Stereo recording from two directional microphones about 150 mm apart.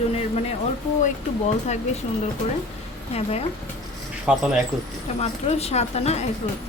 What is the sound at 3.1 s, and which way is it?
Speech, 45° left (ahead or behind).